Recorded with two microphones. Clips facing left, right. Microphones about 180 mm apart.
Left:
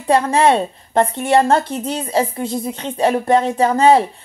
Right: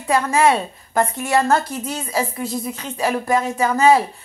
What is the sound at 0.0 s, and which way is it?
A woman's voice, 30° left (ahead or behind).